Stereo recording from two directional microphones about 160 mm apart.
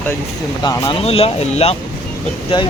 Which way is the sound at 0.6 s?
25° left (ahead or behind).